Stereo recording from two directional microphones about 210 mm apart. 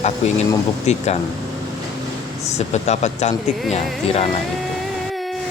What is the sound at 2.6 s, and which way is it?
Speech, 30° left (ahead or behind).